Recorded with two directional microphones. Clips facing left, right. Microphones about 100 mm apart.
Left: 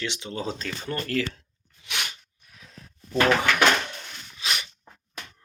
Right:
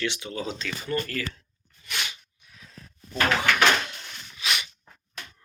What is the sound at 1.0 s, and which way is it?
Speech, 65° left (ahead or behind).